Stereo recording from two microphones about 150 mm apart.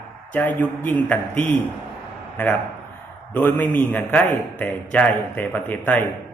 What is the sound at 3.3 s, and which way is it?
A man's voice, 10° left (ahead or behind).